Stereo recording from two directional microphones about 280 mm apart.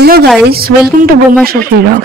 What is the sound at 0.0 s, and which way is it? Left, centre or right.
A woman's voice, right.